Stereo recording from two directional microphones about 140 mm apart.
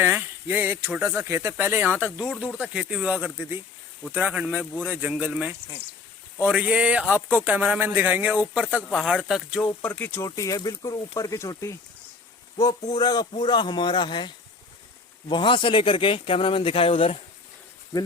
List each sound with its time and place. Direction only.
0.0 s speech: 15° right (ahead or behind)
9.8 s speech: 10° left (ahead or behind)
10.2 s speech: 25° left (ahead or behind)
13.0 s a man's voice: 30° left (ahead or behind)